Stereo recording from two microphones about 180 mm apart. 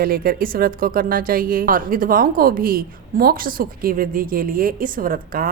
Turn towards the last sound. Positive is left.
turn(degrees=-50)  # may be behind; listen again after turning